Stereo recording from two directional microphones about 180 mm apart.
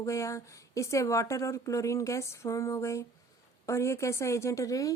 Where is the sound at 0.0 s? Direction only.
15° left (ahead or behind).